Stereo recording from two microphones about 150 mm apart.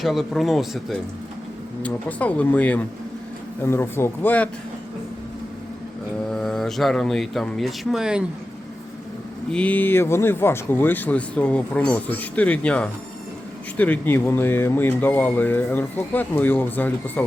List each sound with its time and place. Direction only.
0.0 s speech: centre (ahead or behind)
1.8 s speech: 10° left (ahead or behind)
6.3 s speech: 5° left (ahead or behind)
9.5 s speech: 10° left (ahead or behind)